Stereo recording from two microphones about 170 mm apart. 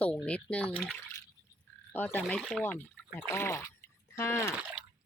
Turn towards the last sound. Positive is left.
turn(degrees=15)  # may be behind; listen again after turning